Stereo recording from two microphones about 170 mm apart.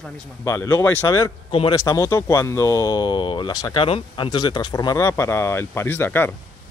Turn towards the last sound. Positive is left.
turn(degrees=10)  # may be behind; listen again after turning